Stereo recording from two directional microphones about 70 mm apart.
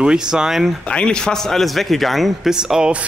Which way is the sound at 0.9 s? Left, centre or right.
Centre.